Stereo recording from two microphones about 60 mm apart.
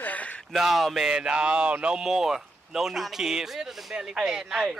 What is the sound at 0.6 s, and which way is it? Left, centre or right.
Speech, centre.